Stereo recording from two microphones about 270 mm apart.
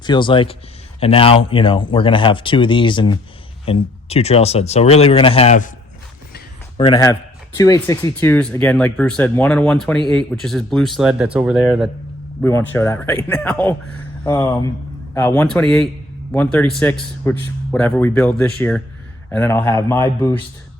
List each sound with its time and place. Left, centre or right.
0.0 s a man's voice: centre
6.7 s a man's voice: centre
12.4 s a man's voice: centre